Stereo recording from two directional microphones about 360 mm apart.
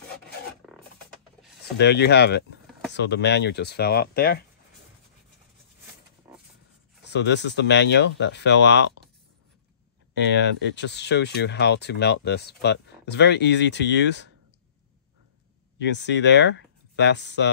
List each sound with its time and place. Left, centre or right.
0.7 s a sound: centre
1.8 s speech: left
6.3 s a sound: centre
7.1 s speech: left
10.1 s speech: left
15.8 s speech: left